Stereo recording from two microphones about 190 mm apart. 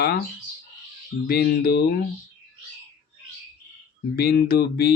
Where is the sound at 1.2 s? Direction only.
55° left (ahead or behind).